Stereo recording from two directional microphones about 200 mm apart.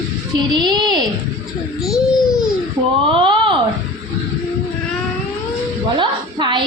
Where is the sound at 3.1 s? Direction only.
25° right (ahead or behind).